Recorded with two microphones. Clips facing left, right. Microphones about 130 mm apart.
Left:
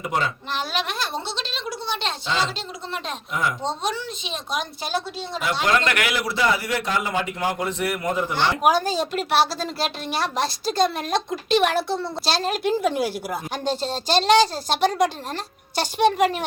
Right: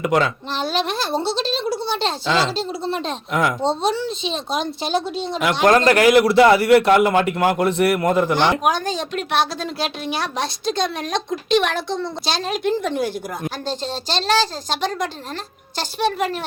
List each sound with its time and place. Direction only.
0.0 s speech: 85° right
0.5 s a woman's voice: 30° right (ahead or behind)
2.2 s speech: 90° right
2.6 s a woman's voice: 30° right (ahead or behind)
5.6 s a woman's voice: 40° right (ahead or behind)
6.1 s a man's voice: 65° right (ahead or behind)
8.6 s a woman's voice: 5° left (ahead or behind)